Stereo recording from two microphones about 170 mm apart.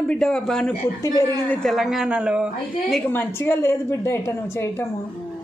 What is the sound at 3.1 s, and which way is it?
A woman's voice, 10° left (ahead or behind).